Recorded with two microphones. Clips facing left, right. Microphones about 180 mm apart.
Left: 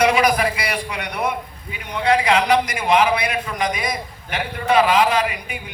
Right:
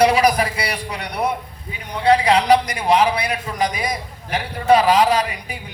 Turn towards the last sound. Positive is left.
turn(degrees=-35)  # may be behind; listen again after turning